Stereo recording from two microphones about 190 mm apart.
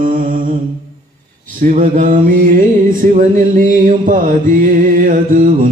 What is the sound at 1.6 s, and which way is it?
Mantra, 45° right (ahead or behind).